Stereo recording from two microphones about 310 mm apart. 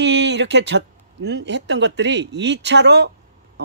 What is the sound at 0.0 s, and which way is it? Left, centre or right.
Speech, right.